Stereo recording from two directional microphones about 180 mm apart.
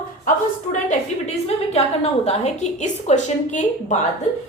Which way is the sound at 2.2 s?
40° left (ahead or behind).